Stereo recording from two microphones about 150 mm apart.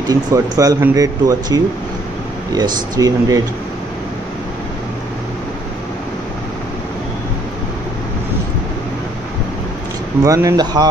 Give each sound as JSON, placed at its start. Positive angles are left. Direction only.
{"t": 0.1, "sound": "speech", "side_deg": -25}
{"t": 10.2, "sound": "speech", "side_deg": -20}